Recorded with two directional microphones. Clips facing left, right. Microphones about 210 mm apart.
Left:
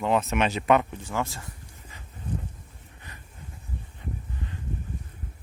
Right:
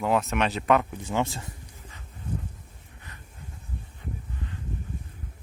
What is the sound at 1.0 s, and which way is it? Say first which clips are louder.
Speech: right 3 dB; 20° right (ahead or behind).